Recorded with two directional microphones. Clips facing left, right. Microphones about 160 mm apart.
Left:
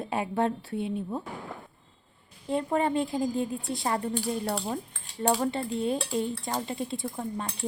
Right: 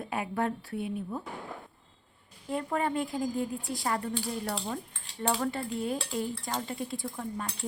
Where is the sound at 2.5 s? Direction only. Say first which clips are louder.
Left 4 dB; 25° left (ahead or behind).